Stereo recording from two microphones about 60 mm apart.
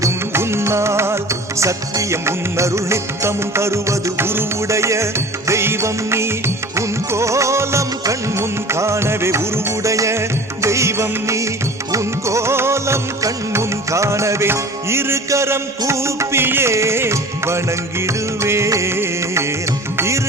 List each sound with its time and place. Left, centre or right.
0.3 s music: right
4.2 s music: right